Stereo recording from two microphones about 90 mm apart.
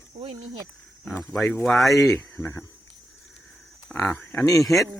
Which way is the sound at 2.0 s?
30° left (ahead or behind).